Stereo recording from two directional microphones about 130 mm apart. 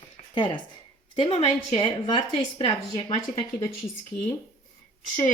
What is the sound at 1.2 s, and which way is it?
A woman's voice, 50° left (ahead or behind).